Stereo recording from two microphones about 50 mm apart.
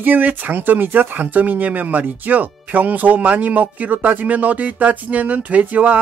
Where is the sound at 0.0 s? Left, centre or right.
Right.